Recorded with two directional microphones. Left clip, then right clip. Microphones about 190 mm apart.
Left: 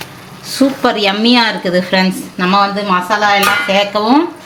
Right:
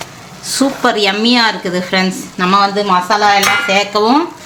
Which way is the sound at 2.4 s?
15° right (ahead or behind).